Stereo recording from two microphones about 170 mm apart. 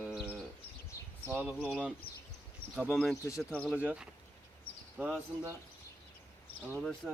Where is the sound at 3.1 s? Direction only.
20° left (ahead or behind).